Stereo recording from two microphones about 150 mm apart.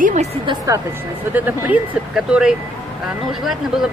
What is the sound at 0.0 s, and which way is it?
Speech, 55° right (ahead or behind).